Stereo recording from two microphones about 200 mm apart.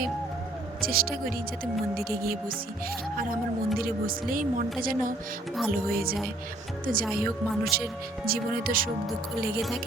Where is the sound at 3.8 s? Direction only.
45° right (ahead or behind).